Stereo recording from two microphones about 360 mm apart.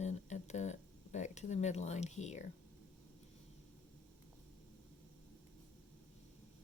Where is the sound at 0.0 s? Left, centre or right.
Centre.